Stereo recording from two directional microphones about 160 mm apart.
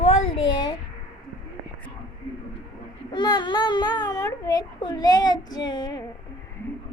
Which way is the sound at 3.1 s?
30° left (ahead or behind).